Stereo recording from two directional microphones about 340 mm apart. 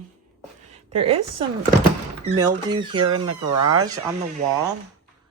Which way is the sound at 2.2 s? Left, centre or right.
Centre.